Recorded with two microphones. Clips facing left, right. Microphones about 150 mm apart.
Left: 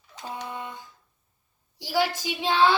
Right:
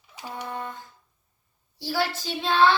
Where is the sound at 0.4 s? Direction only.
50° right (ahead or behind).